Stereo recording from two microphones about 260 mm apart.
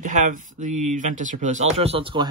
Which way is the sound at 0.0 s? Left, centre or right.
Right.